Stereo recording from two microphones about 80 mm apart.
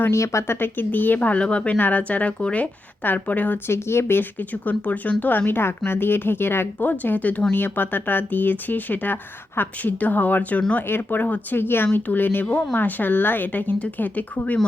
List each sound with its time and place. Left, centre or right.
0.1 s speech: left
3.7 s speech: left